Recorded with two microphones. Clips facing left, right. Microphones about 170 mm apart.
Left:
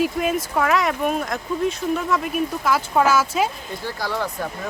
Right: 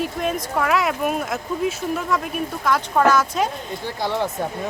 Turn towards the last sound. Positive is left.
turn(degrees=-20)  # may be behind; listen again after turning